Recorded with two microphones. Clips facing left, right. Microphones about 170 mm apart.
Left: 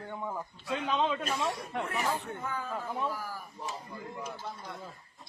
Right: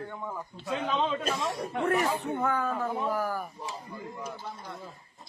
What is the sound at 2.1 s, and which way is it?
A man's voice, 60° right (ahead or behind).